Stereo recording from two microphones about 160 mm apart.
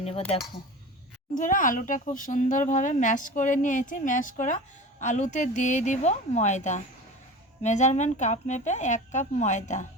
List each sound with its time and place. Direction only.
0.0 s speech: 40° left (ahead or behind)
1.4 s speech: 55° left (ahead or behind)